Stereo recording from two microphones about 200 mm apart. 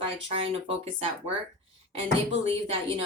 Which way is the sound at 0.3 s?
30° right (ahead or behind).